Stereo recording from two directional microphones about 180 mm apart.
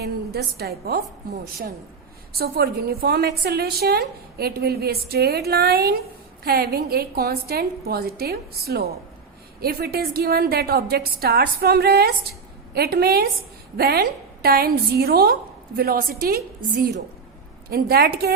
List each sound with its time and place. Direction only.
0.0 s a woman's voice: 60° right (ahead or behind)
2.4 s a woman's voice: 60° right (ahead or behind)